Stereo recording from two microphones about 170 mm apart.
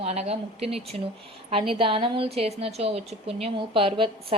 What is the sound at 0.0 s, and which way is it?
A woman's voice, 40° right (ahead or behind).